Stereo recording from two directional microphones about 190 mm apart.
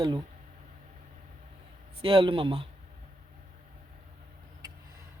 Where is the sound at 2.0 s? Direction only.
25° right (ahead or behind).